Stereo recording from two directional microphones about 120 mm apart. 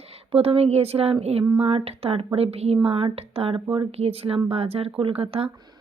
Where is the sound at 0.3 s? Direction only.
55° right (ahead or behind).